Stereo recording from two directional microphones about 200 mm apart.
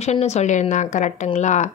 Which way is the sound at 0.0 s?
35° left (ahead or behind).